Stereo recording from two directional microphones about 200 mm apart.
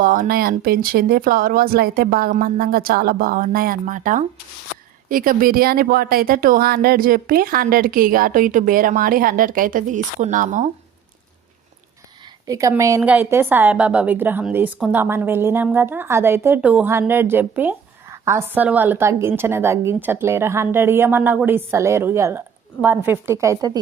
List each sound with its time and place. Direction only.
0.0 s speech: 45° right (ahead or behind)
12.5 s a woman's voice: 15° right (ahead or behind)